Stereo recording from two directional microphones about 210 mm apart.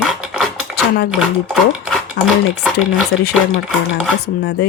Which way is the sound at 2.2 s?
55° left (ahead or behind).